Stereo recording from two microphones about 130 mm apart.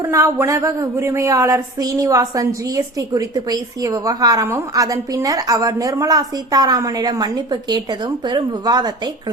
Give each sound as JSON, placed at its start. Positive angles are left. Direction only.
{"t": 0.0, "sound": "speech", "side_deg": -20}